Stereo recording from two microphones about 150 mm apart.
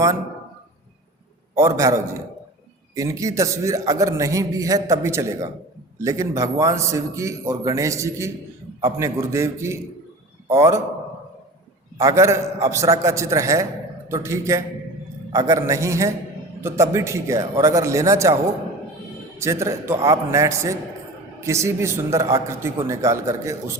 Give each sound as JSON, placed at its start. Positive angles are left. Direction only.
{"t": 1.5, "sound": "a man's voice", "side_deg": -20}
{"t": 11.9, "sound": "a man's voice", "side_deg": -20}
{"t": 19.4, "sound": "a man's voice", "side_deg": -20}